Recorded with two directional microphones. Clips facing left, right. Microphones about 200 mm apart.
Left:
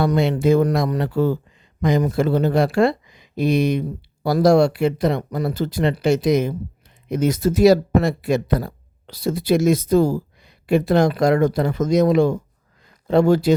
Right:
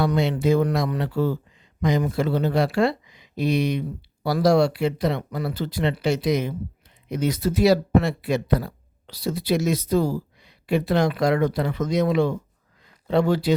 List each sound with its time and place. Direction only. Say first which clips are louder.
0.0 s speech: left 3 dB; 50° left (ahead or behind)